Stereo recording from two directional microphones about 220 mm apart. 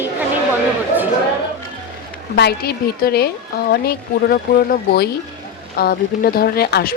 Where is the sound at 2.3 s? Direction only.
45° left (ahead or behind).